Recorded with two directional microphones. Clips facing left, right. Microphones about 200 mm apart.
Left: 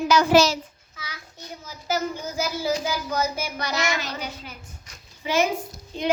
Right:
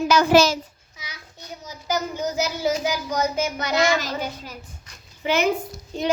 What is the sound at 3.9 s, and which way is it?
Child singing, 45° right (ahead or behind).